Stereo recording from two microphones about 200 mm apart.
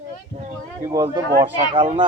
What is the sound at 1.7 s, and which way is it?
Speech, 35° right (ahead or behind).